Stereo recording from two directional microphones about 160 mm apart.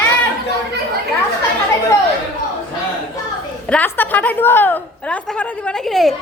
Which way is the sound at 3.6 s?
10° left (ahead or behind).